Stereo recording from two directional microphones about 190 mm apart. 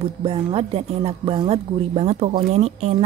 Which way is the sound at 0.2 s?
30° right (ahead or behind).